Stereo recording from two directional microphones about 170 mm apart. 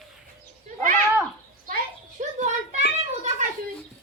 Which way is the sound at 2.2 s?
45° right (ahead or behind).